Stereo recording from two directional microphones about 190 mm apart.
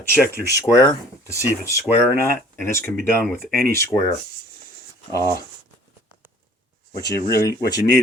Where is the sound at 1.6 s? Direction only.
55° right (ahead or behind).